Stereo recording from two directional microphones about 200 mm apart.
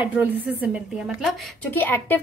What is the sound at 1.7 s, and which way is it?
Speech, 10° left (ahead or behind).